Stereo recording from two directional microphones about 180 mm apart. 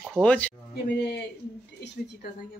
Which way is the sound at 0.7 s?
65° left (ahead or behind).